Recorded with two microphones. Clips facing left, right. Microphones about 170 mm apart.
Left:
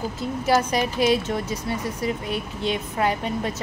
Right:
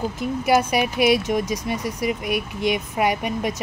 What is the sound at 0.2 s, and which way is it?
Speech, 10° right (ahead or behind).